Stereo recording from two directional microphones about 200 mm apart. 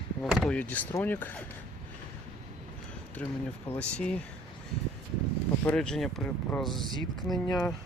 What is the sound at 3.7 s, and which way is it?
Speech, 5° left (ahead or behind).